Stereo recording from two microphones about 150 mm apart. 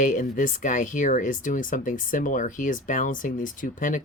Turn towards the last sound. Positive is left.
turn(degrees=60)  # may be behind; listen again after turning